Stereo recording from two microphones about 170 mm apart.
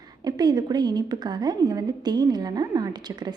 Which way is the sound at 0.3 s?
25° right (ahead or behind).